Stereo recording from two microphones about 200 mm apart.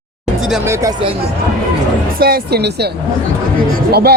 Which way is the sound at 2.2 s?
50° right (ahead or behind).